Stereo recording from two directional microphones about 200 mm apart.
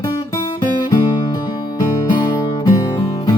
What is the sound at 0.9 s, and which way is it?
Music, 20° left (ahead or behind).